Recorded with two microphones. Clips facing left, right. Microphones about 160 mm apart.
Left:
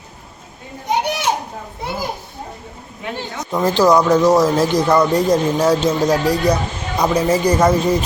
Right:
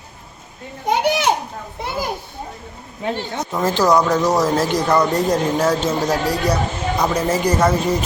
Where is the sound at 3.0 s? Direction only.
30° right (ahead or behind).